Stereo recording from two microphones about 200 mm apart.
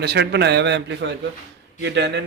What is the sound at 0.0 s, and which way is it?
A man's voice, 55° right (ahead or behind).